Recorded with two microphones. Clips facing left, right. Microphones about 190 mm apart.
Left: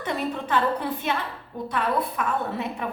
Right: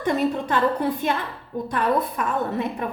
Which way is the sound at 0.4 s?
40° right (ahead or behind).